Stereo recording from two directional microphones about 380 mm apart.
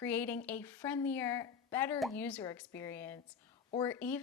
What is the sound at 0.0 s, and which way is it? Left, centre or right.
A woman's voice, centre.